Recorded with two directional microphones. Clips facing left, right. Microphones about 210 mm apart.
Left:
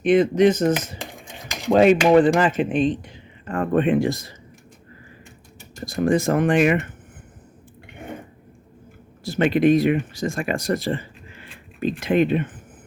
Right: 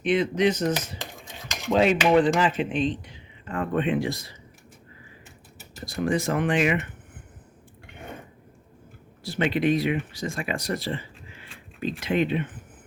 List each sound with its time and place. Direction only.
0.0 s speech: 50° left (ahead or behind)
1.7 s speech: 50° left (ahead or behind)
5.8 s speech: 45° left (ahead or behind)
9.2 s speech: 45° left (ahead or behind)